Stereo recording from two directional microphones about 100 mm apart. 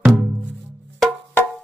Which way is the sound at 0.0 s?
20° right (ahead or behind).